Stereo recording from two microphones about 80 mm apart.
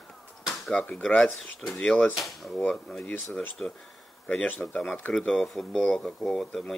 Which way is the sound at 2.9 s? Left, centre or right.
Centre.